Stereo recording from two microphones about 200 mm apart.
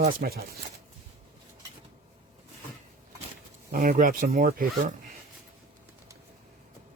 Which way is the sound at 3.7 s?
45° right (ahead or behind).